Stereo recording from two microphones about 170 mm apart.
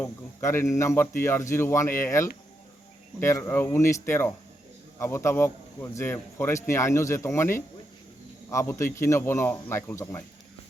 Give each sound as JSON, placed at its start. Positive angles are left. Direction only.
{"t": 0.0, "sound": "a man's voice", "side_deg": 15}